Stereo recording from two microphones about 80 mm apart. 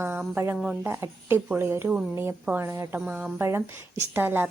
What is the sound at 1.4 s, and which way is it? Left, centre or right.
Speech, centre.